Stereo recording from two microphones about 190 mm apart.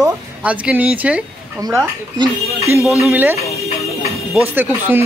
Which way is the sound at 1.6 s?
20° right (ahead or behind).